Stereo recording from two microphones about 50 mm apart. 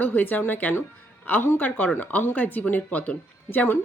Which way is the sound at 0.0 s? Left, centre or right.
Left.